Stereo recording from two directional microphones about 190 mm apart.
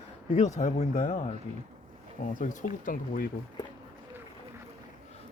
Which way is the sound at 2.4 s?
45° left (ahead or behind).